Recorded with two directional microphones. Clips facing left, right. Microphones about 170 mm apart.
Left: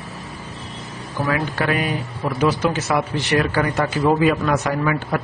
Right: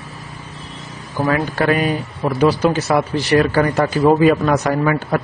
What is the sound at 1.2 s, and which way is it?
A man's voice, 40° right (ahead or behind).